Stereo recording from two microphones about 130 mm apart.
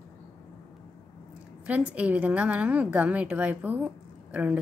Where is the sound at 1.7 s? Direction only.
10° right (ahead or behind).